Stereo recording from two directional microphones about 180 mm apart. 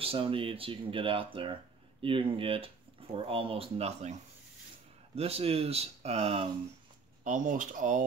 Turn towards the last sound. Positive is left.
turn(degrees=-45)  # may be behind; listen again after turning